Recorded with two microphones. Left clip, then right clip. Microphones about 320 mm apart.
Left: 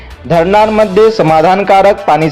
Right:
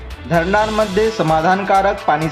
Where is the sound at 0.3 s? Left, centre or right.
Left.